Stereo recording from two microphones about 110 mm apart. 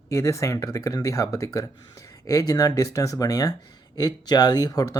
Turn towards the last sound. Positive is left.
turn(degrees=35)  # may be behind; listen again after turning